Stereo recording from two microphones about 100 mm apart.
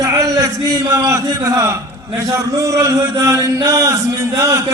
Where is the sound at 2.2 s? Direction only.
35° right (ahead or behind).